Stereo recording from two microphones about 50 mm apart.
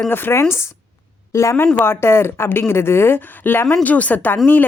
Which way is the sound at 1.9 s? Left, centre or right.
Left.